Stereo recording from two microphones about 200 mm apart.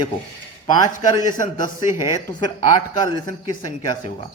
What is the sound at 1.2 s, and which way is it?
Speech, 40° left (ahead or behind).